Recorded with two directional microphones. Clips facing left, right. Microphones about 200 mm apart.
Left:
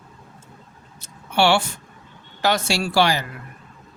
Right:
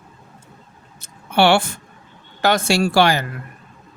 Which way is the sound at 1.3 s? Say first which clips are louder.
Right 3 dB; 55° right (ahead or behind).